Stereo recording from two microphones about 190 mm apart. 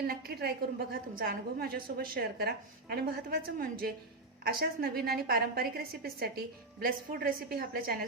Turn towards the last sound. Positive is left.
turn(degrees=-50)  # may be behind; listen again after turning